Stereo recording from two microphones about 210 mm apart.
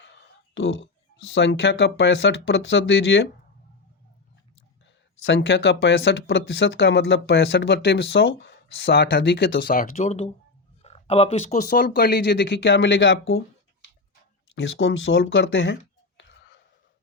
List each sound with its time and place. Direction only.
0.5 s speech: 60° left (ahead or behind)
5.2 s speech: 60° left (ahead or behind)
9.7 s speech: 35° left (ahead or behind)
11.7 s speech: 45° left (ahead or behind)
14.5 s a sound: 65° left (ahead or behind)